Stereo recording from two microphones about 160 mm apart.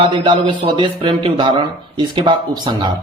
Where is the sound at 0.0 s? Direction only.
30° right (ahead or behind).